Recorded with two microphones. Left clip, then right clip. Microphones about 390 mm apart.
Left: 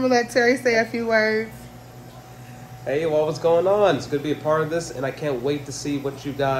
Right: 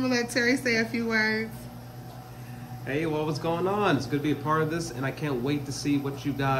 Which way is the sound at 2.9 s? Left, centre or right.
Centre.